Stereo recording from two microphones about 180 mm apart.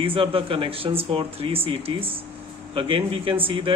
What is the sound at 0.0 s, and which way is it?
A man's voice, 30° right (ahead or behind).